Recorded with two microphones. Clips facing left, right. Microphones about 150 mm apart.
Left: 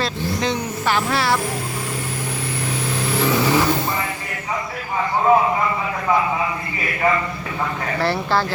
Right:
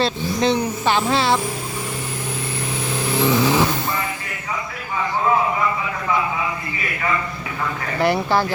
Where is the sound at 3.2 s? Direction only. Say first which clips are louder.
Right 1 dB; 15° right (ahead or behind).